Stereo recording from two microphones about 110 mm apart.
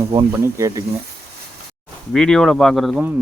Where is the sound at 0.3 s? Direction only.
25° right (ahead or behind).